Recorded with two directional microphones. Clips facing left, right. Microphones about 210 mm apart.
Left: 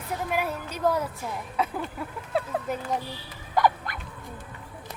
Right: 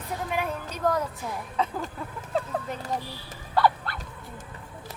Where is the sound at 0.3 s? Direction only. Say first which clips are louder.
Left 1 dB; 5° left (ahead or behind).